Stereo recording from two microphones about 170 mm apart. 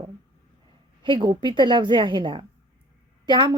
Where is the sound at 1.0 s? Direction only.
30° right (ahead or behind).